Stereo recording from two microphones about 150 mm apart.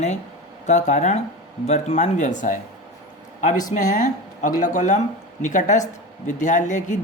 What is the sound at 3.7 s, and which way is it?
Speech, 55° left (ahead or behind).